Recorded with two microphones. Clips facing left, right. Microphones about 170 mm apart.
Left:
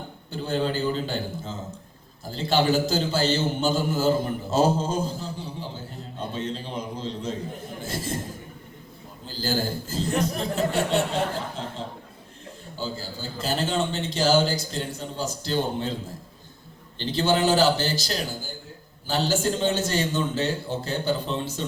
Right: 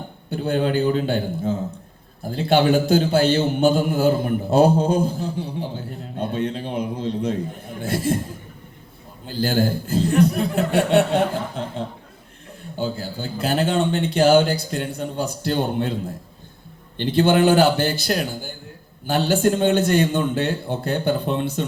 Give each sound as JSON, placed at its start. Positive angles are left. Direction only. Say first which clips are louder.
{"t": 0.3, "sound": "a man's voice", "louder": "right 5 dB", "side_deg": -60}
{"t": 9.2, "sound": "a man's voice", "louder": "right 6 dB", "side_deg": -55}
{"t": 12.7, "sound": "a man's voice", "louder": "right 7 dB", "side_deg": -55}
{"t": 17.0, "sound": "a man's voice", "louder": "right 6 dB", "side_deg": -55}